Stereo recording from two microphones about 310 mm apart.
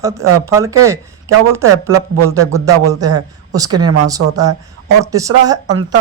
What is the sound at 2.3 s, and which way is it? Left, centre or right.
Speech, centre.